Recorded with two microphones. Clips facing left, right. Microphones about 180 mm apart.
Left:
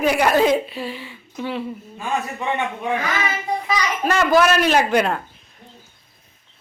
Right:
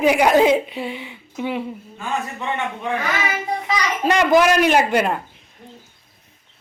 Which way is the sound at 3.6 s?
15° right (ahead or behind).